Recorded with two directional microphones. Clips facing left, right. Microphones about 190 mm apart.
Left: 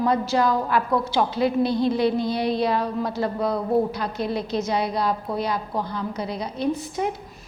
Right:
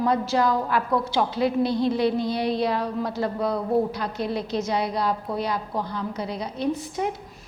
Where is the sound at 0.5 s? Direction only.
20° left (ahead or behind).